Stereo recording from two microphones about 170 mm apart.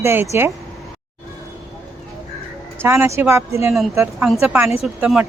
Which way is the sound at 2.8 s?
15° right (ahead or behind).